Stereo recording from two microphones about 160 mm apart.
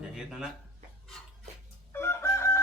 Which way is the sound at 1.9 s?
15° left (ahead or behind).